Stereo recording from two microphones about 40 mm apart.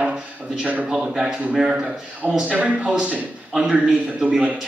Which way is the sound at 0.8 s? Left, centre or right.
Centre.